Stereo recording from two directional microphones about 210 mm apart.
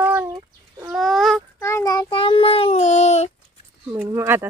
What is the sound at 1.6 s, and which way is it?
Child singing, 15° left (ahead or behind).